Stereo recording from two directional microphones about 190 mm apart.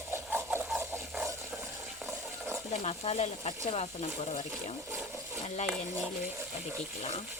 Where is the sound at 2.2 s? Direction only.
10° right (ahead or behind).